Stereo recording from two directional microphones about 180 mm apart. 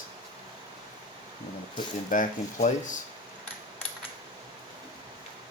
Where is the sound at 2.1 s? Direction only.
45° left (ahead or behind).